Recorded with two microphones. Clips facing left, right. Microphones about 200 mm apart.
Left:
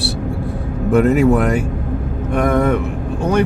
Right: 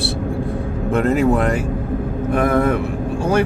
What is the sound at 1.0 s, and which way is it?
Speech, centre (ahead or behind).